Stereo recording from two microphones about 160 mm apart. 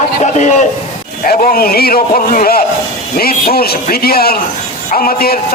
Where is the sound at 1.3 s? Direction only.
60° left (ahead or behind).